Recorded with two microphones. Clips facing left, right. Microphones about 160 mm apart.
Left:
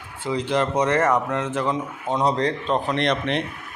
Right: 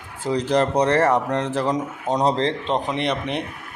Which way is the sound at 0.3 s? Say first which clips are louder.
Right 3 dB; 40° right (ahead or behind).